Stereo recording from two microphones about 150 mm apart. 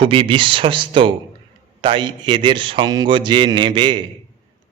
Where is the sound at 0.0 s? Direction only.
35° right (ahead or behind).